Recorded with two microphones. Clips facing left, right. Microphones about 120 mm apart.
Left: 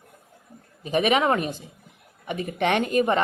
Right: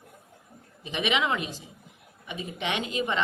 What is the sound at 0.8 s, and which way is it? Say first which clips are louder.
A woman's voice: left 7 dB; 45° left (ahead or behind).